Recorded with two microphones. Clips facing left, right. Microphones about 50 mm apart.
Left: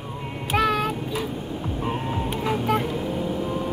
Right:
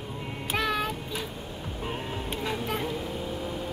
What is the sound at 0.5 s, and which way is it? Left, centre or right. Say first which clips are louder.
Child singing: left 7 dB; centre.